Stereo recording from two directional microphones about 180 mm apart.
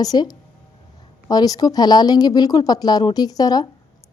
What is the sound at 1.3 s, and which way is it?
A woman's voice, 20° left (ahead or behind).